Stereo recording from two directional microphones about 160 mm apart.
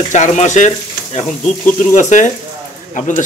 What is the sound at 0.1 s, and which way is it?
Speech, 50° left (ahead or behind).